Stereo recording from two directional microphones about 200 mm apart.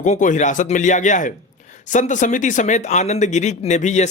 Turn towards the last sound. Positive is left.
turn(degrees=35)  # may be behind; listen again after turning